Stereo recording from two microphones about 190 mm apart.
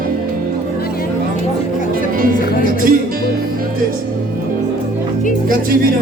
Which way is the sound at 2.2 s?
50° right (ahead or behind).